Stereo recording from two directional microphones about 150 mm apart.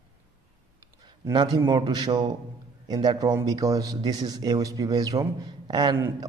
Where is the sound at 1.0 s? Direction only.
30° right (ahead or behind).